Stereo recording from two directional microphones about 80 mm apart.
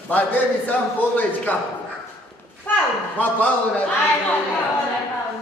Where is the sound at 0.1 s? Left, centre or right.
Left.